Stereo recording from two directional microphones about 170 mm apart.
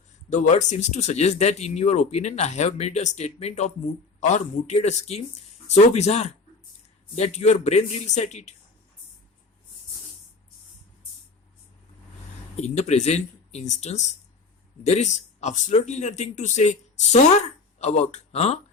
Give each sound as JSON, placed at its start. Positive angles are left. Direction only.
{"t": 0.3, "sound": "a man's voice", "side_deg": 45}
{"t": 12.5, "sound": "speech", "side_deg": 40}